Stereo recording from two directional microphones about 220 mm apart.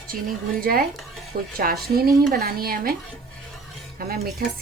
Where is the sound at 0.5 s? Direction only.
40° right (ahead or behind).